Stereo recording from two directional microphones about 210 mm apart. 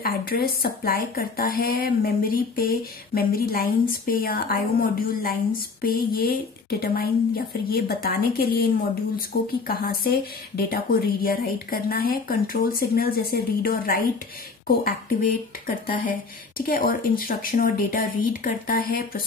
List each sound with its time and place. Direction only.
0.0 s speech: 45° left (ahead or behind)